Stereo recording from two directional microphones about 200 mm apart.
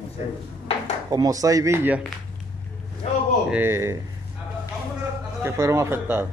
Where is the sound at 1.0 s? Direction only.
20° right (ahead or behind).